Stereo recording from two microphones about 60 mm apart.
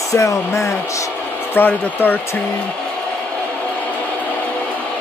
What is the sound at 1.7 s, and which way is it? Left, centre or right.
Speech, left.